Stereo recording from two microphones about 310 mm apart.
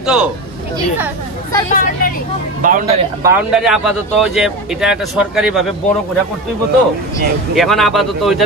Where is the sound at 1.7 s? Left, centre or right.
Left.